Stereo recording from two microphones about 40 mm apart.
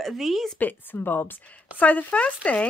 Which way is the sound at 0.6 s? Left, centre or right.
Left.